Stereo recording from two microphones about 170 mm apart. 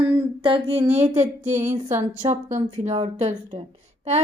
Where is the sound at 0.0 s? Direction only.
30° right (ahead or behind).